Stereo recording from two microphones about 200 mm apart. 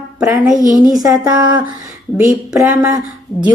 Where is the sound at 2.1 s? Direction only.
5° right (ahead or behind).